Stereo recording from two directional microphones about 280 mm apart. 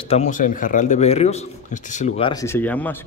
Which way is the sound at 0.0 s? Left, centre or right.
Left.